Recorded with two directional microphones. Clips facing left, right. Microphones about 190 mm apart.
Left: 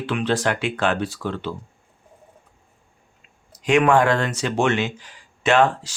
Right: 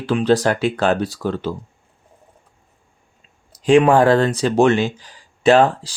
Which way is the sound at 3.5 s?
30° right (ahead or behind).